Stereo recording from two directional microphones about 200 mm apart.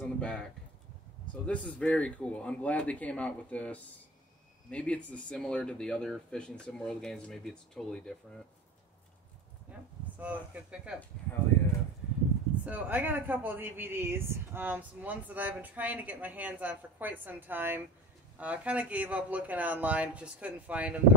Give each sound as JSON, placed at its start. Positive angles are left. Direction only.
{"t": 0.0, "sound": "a sound", "side_deg": 5}
{"t": 1.3, "sound": "a man's voice", "side_deg": 5}
{"t": 9.7, "sound": "speech", "side_deg": -10}
{"t": 12.6, "sound": "speech", "side_deg": -10}